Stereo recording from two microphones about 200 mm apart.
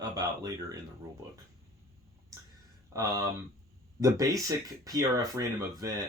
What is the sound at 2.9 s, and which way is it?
Speech, 15° right (ahead or behind).